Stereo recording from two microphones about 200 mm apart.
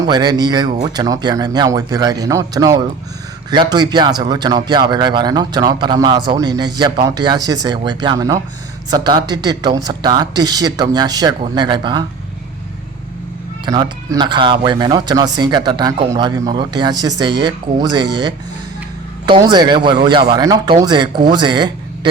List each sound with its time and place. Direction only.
0.0 s speech: 20° right (ahead or behind)
13.7 s speech: 20° right (ahead or behind)